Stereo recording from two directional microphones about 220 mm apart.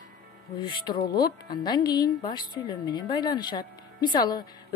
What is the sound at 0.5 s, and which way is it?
Speech, 20° left (ahead or behind).